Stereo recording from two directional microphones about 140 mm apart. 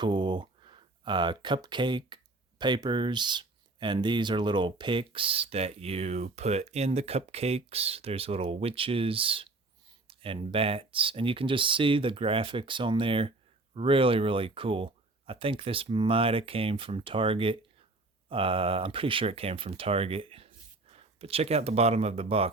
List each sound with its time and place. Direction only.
0.0 s speech: 30° right (ahead or behind)